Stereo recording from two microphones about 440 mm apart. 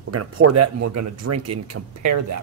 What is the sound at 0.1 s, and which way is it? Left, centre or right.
Speech, right.